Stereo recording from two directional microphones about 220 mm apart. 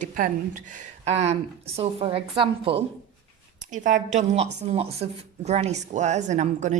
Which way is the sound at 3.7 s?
35° right (ahead or behind).